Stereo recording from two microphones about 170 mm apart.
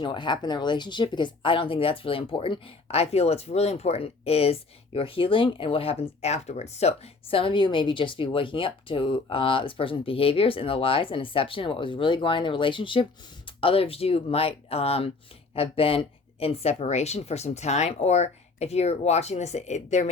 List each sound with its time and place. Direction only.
0.0 s speech: 25° left (ahead or behind); by 20.1 s 45° left (ahead or behind)